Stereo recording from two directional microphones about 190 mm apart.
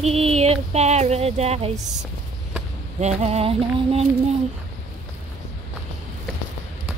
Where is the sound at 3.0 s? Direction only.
35° right (ahead or behind).